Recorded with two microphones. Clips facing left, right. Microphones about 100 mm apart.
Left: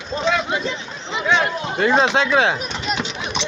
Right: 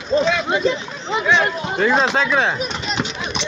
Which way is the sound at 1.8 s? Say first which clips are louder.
Left 1 dB; 60° left (ahead or behind).